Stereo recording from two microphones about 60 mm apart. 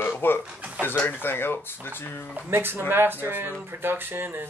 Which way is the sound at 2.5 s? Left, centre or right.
Right.